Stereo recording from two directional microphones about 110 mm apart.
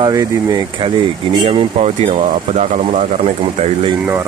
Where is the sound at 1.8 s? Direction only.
80° right.